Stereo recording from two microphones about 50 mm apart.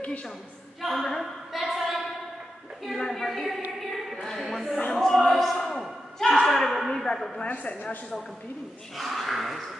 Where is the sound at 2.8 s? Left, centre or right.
Centre.